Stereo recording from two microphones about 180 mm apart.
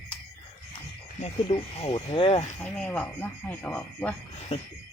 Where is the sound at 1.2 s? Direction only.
30° left (ahead or behind).